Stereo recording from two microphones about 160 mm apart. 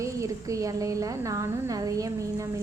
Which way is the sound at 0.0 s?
20° right (ahead or behind).